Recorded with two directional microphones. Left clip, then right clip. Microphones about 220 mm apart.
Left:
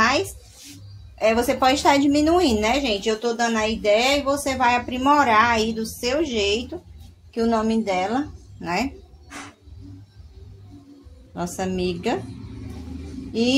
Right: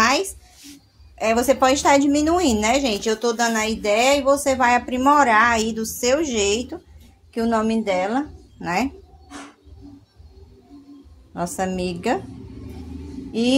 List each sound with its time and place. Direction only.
1.1 s a woman's voice: 25° right (ahead or behind)
11.3 s a woman's voice: 15° right (ahead or behind)
13.3 s speech: 25° right (ahead or behind)